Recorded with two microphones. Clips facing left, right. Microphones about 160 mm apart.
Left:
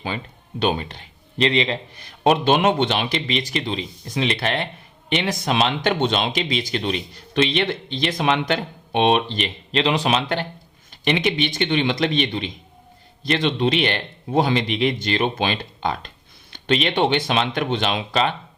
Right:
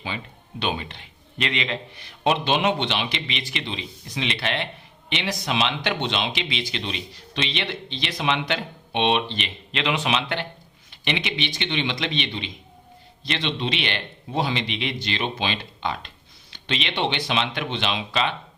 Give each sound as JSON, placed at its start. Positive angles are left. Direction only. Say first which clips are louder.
{"t": 0.6, "sound": "a man's voice", "louder": "left 6 dB", "side_deg": 40}